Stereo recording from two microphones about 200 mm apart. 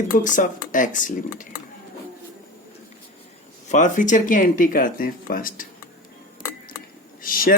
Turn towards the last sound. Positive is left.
turn(degrees=45)  # may be behind; listen again after turning